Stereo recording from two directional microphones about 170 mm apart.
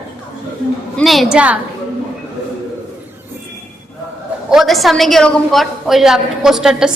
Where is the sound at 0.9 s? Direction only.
Centre (ahead or behind).